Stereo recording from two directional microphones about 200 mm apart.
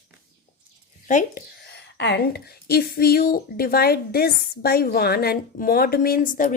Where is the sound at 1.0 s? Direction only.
40° left (ahead or behind).